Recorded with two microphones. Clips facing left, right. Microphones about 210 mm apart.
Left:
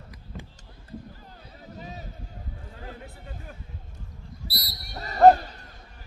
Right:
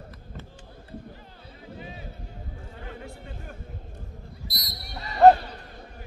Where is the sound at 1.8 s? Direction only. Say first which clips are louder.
Left 2 dB; 40° left (ahead or behind).